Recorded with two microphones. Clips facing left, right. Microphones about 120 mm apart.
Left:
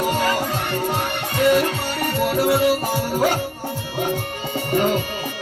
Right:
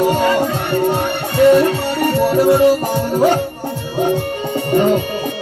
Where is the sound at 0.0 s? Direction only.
30° right (ahead or behind).